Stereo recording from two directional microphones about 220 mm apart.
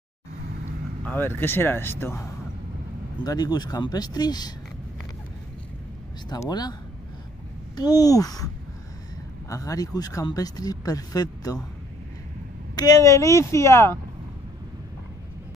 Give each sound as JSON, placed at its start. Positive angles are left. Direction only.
{"t": 1.0, "sound": "speech", "side_deg": 10}
{"t": 3.3, "sound": "speech", "side_deg": 20}
{"t": 6.2, "sound": "speech", "side_deg": 20}
{"t": 9.5, "sound": "speech", "side_deg": 15}
{"t": 12.7, "sound": "speech", "side_deg": 15}